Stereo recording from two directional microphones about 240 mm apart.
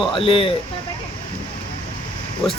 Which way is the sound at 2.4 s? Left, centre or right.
Centre.